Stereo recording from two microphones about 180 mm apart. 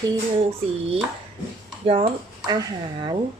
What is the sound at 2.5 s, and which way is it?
Speech, 25° right (ahead or behind).